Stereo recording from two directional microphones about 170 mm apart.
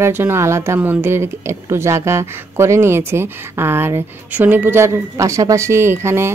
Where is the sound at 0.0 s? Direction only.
15° right (ahead or behind).